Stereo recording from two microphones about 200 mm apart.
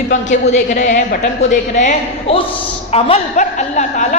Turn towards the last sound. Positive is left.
turn(degrees=35)  # may be behind; listen again after turning